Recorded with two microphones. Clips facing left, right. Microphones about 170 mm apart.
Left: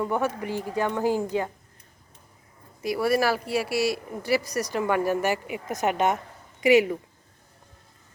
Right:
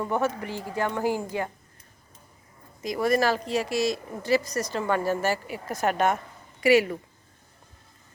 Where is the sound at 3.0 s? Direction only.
10° left (ahead or behind).